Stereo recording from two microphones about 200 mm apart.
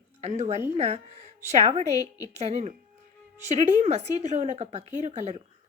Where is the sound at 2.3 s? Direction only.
35° right (ahead or behind).